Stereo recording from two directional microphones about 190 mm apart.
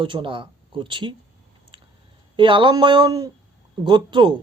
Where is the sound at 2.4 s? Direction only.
25° right (ahead or behind).